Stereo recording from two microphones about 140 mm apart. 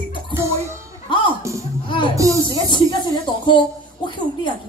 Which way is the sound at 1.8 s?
35° left (ahead or behind).